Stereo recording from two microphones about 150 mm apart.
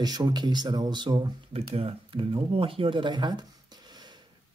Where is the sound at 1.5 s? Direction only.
40° right (ahead or behind).